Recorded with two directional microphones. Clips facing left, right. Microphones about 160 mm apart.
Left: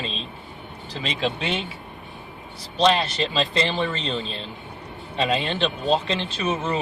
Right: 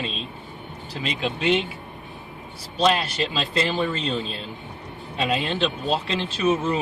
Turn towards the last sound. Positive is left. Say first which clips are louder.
# right 3 dB
turn(degrees=-5)  # may be behind; listen again after turning